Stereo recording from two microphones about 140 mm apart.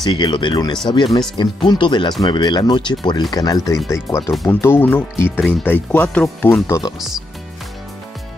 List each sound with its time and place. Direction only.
0.0 s speech: 30° left (ahead or behind)
4.5 s speech: 15° left (ahead or behind)
7.0 s speech: centre (ahead or behind)